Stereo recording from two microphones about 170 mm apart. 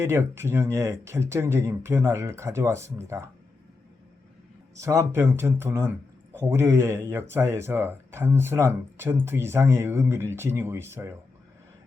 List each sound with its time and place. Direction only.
0.0 s speech: 15° right (ahead or behind)
4.7 s speech: 20° right (ahead or behind)